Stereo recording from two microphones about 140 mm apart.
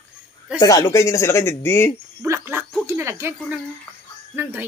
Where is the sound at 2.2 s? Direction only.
20° right (ahead or behind).